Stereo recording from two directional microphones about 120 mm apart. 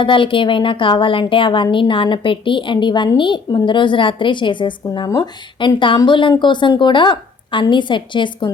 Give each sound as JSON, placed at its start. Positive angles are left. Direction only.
{"t": 0.0, "sound": "a woman's voice", "side_deg": 45}
{"t": 5.0, "sound": "speech", "side_deg": 30}
{"t": 5.5, "sound": "a woman's voice", "side_deg": 40}